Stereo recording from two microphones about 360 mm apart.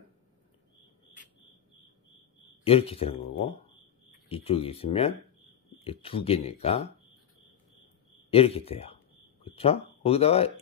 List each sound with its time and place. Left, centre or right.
2.6 s speech: centre
8.3 s speech: centre